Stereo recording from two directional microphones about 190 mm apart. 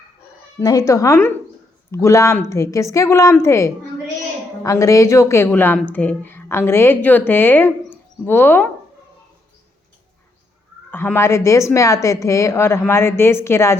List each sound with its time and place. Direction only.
0.6 s a woman's voice: 20° left (ahead or behind)
10.9 s a woman's voice: 10° left (ahead or behind)